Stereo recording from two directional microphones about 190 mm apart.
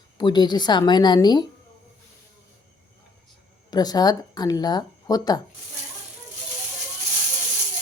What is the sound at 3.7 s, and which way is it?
Speech, 20° left (ahead or behind).